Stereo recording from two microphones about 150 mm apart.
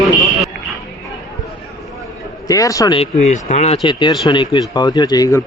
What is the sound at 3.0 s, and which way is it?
Speech, 50° left (ahead or behind).